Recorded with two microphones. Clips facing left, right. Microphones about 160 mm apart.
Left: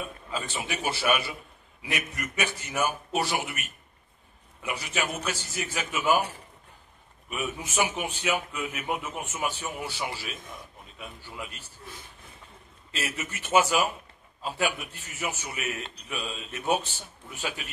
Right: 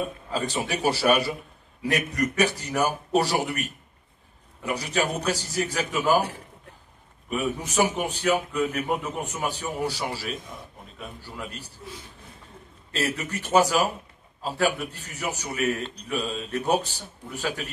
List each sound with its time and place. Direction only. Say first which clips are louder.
0.0 s a man's voice: right 6 dB; 40° right (ahead or behind)
7.2 s a man's voice: right 6 dB; 35° right (ahead or behind)
11.4 s a man's voice: right 5 dB; 35° right (ahead or behind)
13.2 s a man's voice: right 2 dB; 35° right (ahead or behind)